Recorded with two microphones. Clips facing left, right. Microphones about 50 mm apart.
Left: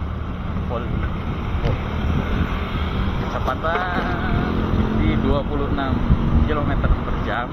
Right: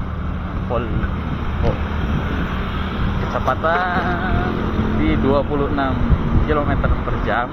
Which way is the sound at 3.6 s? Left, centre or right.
Right.